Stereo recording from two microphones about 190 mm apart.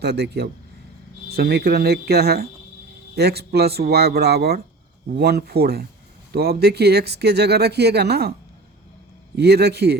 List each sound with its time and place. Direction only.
0.0 s speech: 60° right (ahead or behind)